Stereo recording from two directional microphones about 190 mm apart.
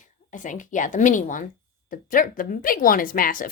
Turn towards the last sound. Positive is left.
turn(degrees=45)  # may be behind; listen again after turning